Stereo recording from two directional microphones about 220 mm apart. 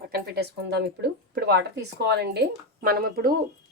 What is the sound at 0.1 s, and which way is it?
Speech, 45° right (ahead or behind).